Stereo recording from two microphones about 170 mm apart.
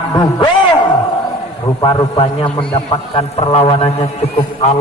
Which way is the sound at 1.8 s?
25° left (ahead or behind).